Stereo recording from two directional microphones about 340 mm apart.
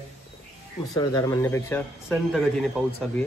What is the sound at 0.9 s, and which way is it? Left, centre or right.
Speech, centre.